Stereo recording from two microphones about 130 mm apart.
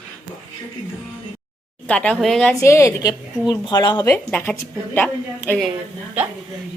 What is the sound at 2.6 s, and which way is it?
Speech, 20° left (ahead or behind).